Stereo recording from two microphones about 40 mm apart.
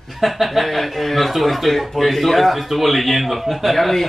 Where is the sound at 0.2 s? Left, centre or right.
Centre.